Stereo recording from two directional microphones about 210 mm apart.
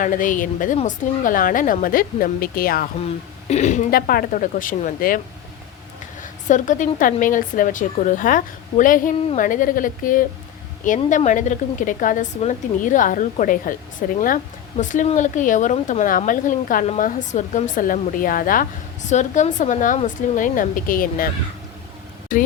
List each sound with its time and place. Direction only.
0.0 s a woman's voice: 40° left (ahead or behind)
6.5 s a woman's voice: 35° left (ahead or behind)